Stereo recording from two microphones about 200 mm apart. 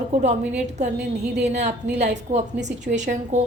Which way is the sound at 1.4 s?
35° right (ahead or behind).